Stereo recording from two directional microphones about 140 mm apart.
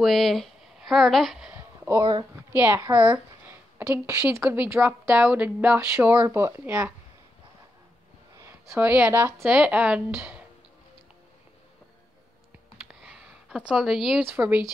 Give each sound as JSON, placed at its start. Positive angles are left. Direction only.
{"t": 0.0, "sound": "speech", "side_deg": 0}
{"t": 2.0, "sound": "a woman's voice", "side_deg": -25}
{"t": 2.3, "sound": "a woman's voice", "side_deg": -15}
{"t": 8.4, "sound": "a woman's voice", "side_deg": -15}
{"t": 13.0, "sound": "a sound", "side_deg": -5}
{"t": 14.3, "sound": "a woman's voice", "side_deg": -10}